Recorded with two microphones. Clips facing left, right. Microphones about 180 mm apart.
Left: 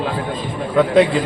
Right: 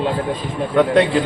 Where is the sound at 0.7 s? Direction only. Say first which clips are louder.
Left 1 dB; centre (ahead or behind).